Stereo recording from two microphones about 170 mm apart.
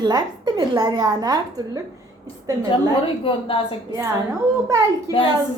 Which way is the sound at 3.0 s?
30° left (ahead or behind).